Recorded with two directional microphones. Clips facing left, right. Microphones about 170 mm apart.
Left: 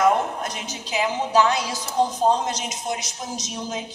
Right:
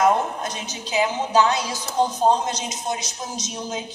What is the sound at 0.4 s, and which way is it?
A woman's voice, 20° right (ahead or behind).